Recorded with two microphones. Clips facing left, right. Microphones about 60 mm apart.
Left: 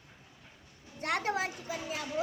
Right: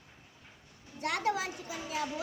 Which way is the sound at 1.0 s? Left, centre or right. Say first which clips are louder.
Even; left.